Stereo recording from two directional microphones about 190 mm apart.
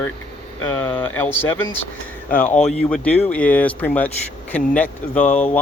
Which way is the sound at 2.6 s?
40° left (ahead or behind).